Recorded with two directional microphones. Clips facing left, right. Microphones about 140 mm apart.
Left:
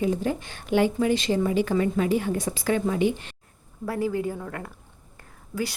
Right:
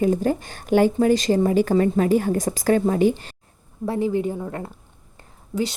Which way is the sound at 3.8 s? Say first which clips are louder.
Right 4 dB; 25° right (ahead or behind).